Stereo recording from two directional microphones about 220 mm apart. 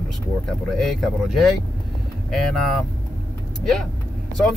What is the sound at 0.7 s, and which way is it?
Speech, centre (ahead or behind).